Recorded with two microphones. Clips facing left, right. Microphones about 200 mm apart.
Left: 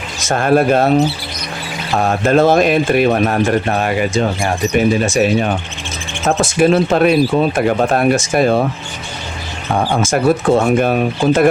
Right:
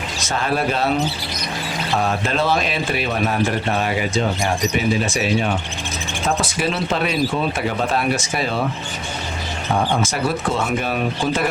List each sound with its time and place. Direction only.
0.2 s speech: 50° left (ahead or behind)
2.0 s speech: 50° left (ahead or behind)
9.9 s speech: 45° left (ahead or behind)